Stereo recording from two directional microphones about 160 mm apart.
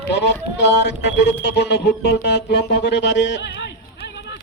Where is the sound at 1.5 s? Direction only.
90° left.